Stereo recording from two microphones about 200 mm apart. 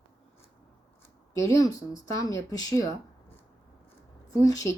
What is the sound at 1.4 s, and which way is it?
Speech, 15° left (ahead or behind).